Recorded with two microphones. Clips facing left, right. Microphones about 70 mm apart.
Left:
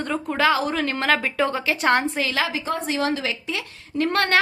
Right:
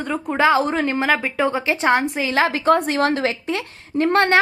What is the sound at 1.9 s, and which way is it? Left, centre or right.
Speech, centre.